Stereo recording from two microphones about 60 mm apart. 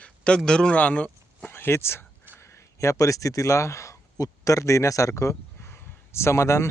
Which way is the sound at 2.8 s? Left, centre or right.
Left.